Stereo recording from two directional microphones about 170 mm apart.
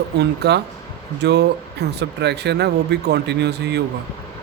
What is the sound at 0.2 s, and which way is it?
Speech, 75° right (ahead or behind).